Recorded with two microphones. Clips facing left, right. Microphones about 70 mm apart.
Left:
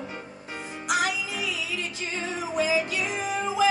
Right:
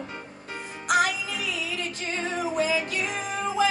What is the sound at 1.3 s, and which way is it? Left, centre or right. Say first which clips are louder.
Music: even; right.